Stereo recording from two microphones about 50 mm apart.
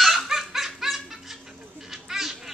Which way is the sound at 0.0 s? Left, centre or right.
Centre.